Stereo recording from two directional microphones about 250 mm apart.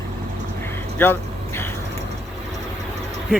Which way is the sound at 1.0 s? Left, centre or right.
Centre.